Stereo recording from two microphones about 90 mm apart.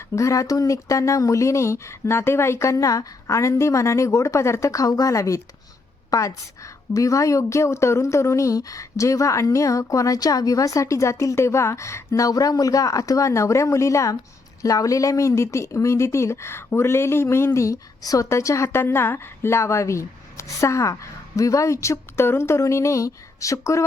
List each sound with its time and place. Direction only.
0.2 s a woman's voice: 35° left (ahead or behind)